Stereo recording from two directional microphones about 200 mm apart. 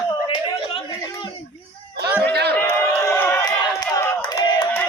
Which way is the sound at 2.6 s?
15° left (ahead or behind).